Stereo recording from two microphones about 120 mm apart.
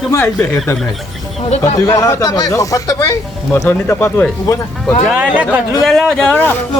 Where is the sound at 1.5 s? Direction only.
60° left (ahead or behind).